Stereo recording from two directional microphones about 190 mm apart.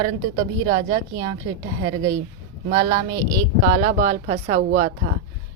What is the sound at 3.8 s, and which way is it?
Speech, 40° right (ahead or behind).